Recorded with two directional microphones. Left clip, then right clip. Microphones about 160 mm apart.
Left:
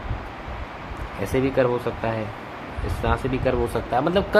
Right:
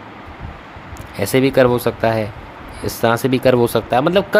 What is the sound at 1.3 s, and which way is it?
Speech, 90° right.